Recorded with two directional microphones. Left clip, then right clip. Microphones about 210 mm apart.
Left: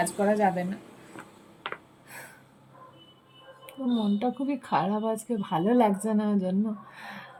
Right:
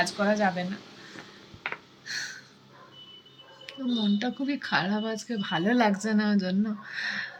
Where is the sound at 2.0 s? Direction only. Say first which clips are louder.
Right 11 dB; 20° left (ahead or behind).